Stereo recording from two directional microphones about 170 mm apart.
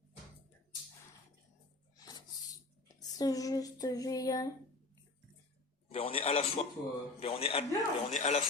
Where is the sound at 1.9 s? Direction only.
25° left (ahead or behind).